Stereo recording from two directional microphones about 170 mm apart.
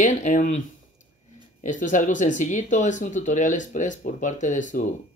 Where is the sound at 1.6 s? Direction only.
50° left (ahead or behind).